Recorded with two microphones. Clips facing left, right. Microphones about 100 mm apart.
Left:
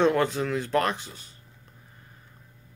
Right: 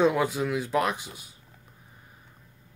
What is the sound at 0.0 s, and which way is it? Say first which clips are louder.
Speech: left 1 dB; 5° right (ahead or behind).